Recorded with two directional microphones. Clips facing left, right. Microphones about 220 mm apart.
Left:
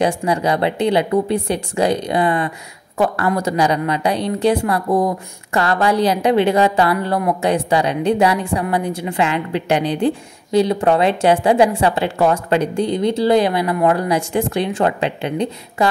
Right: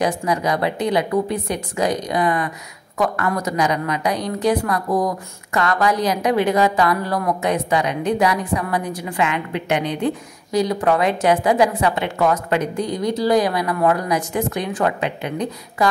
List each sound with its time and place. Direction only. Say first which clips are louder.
0.0 s a woman's voice: left 3 dB; 30° left (ahead or behind)